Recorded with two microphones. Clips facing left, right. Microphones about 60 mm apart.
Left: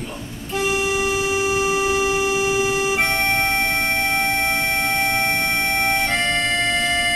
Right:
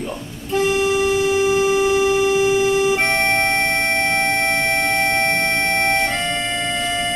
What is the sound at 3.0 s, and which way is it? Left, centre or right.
Music, centre.